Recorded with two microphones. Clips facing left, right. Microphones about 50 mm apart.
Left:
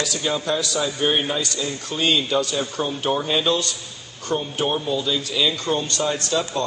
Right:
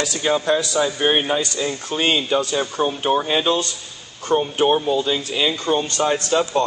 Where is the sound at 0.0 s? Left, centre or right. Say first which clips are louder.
Right 4 dB; right.